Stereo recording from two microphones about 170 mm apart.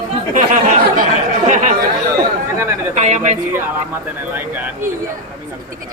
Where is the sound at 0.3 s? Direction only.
50° right (ahead or behind).